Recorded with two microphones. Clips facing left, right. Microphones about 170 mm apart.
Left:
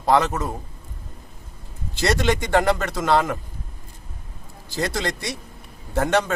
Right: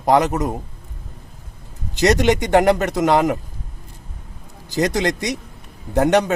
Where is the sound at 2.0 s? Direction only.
15° right (ahead or behind).